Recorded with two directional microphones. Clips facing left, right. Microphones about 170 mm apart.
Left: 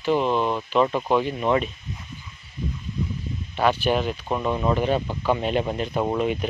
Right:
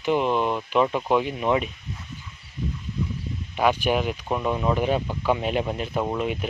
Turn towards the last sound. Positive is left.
turn(degrees=0)  # may be behind; listen again after turning